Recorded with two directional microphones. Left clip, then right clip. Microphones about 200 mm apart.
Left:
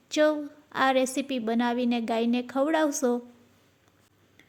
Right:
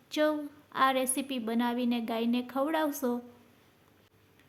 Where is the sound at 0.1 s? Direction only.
25° left (ahead or behind).